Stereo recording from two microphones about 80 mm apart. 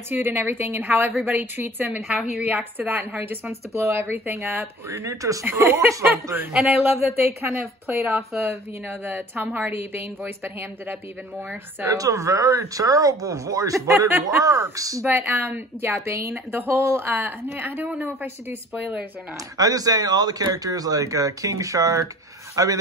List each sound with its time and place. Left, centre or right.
0.1 s speech: right
2.0 s a woman's voice: centre
2.4 s speech: right
11.8 s speech: right
13.9 s speech: right
14.2 s speech: right
15.0 s speech: right
19.5 s speech: right